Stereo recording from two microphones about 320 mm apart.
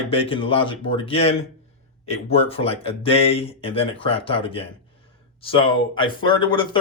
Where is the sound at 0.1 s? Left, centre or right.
Centre.